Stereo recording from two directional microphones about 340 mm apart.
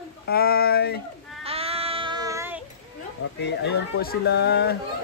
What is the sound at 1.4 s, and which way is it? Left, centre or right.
Child singing, centre.